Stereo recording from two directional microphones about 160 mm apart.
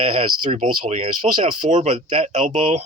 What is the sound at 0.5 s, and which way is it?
Speech, 50° right (ahead or behind).